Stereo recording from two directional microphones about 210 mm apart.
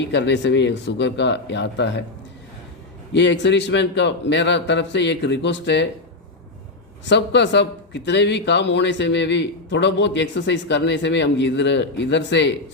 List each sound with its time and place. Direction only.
0.1 s a man's voice: 55° left (ahead or behind)
3.1 s a man's voice: 55° left (ahead or behind)
7.0 s a man's voice: 55° left (ahead or behind)